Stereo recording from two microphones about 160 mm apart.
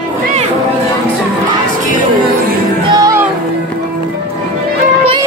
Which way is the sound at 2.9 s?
20° right (ahead or behind).